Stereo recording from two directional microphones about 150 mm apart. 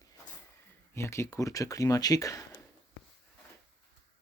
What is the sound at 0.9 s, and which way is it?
Speech, 20° left (ahead or behind).